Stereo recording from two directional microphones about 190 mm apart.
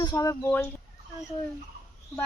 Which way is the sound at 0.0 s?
20° left (ahead or behind).